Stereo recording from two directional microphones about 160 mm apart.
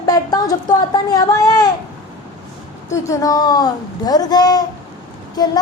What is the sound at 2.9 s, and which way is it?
A woman's voice, 20° left (ahead or behind).